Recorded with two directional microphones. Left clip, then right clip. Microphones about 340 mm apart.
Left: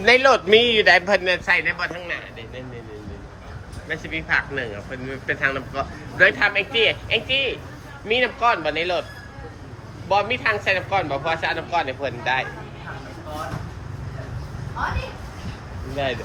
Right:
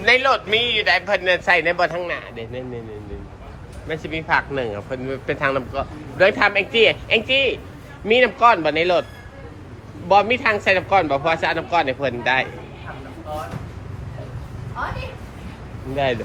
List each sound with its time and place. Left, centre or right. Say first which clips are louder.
0.0 s a man's voice: left 1 dB; centre
2.0 s a sound: right 4 dB; centre
3.8 s a man's voice: right 2 dB; centre
10.1 s a man's voice: right 4 dB; centre